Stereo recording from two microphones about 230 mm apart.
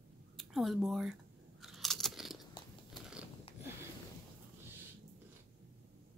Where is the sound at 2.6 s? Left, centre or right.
Centre.